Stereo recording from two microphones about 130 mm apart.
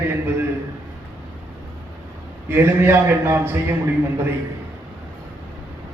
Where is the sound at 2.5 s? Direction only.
15° right (ahead or behind).